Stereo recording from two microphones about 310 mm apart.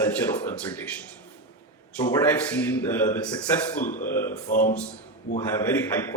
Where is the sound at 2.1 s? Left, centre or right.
Centre.